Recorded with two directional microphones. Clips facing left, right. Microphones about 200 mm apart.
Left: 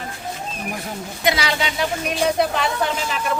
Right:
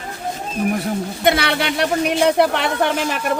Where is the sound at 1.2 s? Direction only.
60° right (ahead or behind).